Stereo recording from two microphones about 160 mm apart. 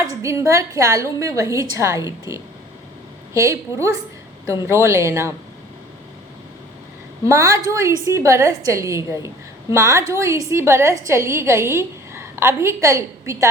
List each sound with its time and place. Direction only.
0.0 s a woman's voice: 20° right (ahead or behind)
7.3 s a woman's voice: 20° right (ahead or behind)